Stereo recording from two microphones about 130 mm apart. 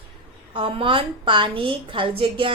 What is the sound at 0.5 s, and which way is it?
A woman's voice, 40° right (ahead or behind).